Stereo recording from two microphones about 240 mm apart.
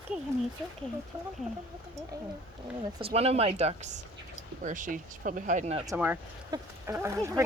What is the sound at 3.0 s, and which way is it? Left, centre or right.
Speech, right.